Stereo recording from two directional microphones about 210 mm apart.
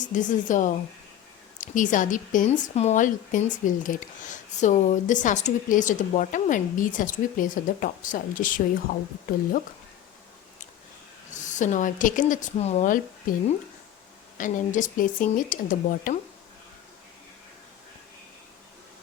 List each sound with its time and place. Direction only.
0.0 s speech: 35° left (ahead or behind)
11.3 s a woman's voice: 35° left (ahead or behind)
14.3 s speech: 40° left (ahead or behind)